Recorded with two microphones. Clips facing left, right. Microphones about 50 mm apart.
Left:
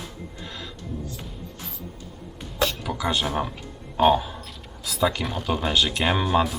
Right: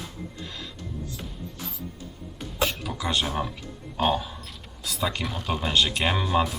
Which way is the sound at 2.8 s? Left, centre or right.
Left.